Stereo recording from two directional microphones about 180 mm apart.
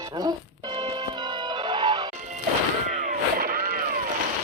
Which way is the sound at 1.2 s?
25° right (ahead or behind).